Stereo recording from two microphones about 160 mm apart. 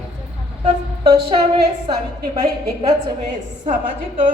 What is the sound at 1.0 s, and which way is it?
Speech, 35° right (ahead or behind).